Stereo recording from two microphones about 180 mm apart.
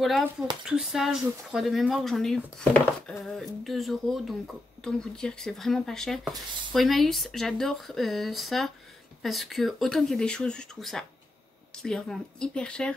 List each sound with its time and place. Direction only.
0.7 s speech: 5° right (ahead or behind)